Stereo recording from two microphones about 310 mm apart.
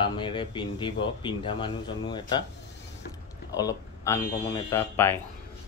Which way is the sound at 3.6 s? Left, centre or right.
Centre.